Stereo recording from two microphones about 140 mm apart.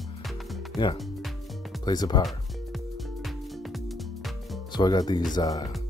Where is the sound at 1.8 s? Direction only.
30° left (ahead or behind).